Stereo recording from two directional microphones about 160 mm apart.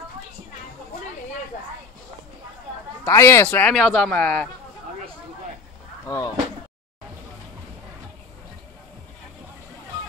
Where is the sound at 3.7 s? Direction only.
5° left (ahead or behind).